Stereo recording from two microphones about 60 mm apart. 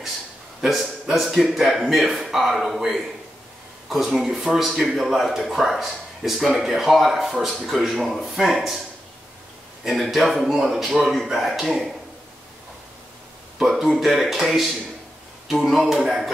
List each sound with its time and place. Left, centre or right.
0.6 s speech: centre
9.8 s speech: centre
13.6 s speech: centre